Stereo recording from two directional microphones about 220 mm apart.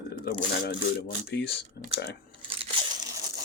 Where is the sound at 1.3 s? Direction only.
50° left (ahead or behind).